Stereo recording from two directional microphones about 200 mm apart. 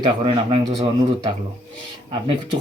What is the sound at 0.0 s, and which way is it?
Speech, 25° right (ahead or behind).